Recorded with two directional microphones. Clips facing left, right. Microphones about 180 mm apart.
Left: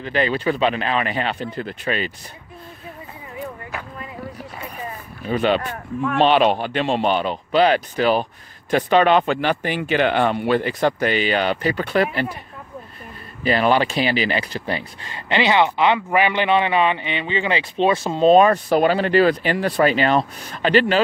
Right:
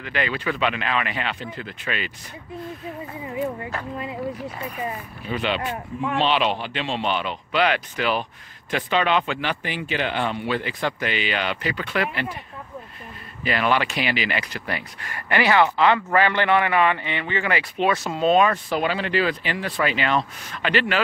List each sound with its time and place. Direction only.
0.0 s speech: 35° left (ahead or behind)
5.2 s speech: 45° left (ahead or behind)
13.4 s speech: 35° left (ahead or behind)